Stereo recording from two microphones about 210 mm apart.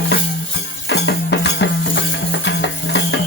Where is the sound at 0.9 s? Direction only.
55° left (ahead or behind).